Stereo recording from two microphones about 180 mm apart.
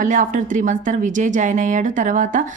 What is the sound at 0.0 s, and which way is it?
A woman's voice, 45° right (ahead or behind).